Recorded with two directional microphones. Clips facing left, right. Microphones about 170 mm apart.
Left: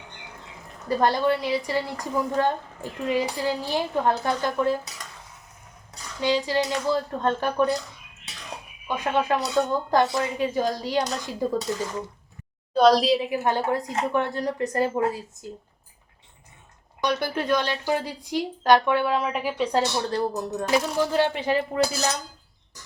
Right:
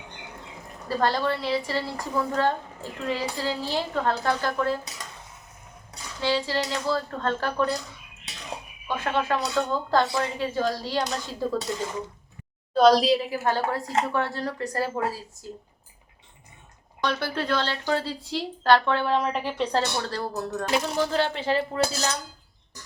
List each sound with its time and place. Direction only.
0.9 s a woman's voice: 20° left (ahead or behind)
6.1 s a woman's voice: 15° left (ahead or behind)
9.0 s a woman's voice: 15° left (ahead or behind)
12.7 s a woman's voice: centre (ahead or behind)
13.3 s speech: 20° left (ahead or behind)
17.0 s a woman's voice: 15° left (ahead or behind)
19.8 s a woman's voice: 20° left (ahead or behind)